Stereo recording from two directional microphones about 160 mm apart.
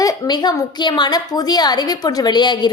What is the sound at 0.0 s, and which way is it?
A woman's voice, 25° left (ahead or behind).